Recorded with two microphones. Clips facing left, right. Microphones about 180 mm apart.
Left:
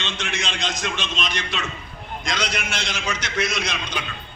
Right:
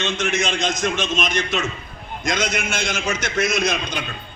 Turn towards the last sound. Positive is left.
turn(degrees=-45)  # may be behind; listen again after turning